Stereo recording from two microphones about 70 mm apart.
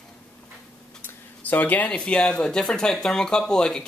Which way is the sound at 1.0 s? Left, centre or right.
Left.